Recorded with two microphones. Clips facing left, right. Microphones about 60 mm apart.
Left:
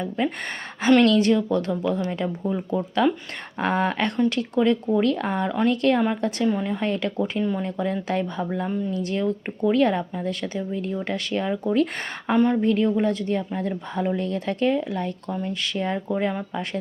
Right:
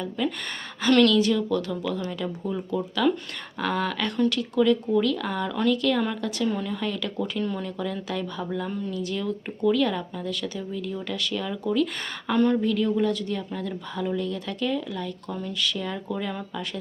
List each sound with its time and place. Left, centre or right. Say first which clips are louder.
0.2 s speech: left 2 dB; left
1.1 s speech: left 3 dB; left
5.7 s speech: left 3 dB; left
6.0 s speech: left 4 dB; left
7.2 s speech: left 4 dB; centre; by 11.9 s left
12.3 s speech: left 2 dB; left
12.6 s speech: left 3 dB; left